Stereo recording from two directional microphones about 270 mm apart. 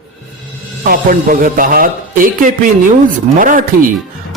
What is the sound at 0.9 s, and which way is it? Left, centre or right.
A man's voice, right.